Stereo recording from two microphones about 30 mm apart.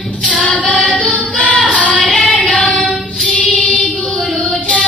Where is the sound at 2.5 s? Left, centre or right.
Left.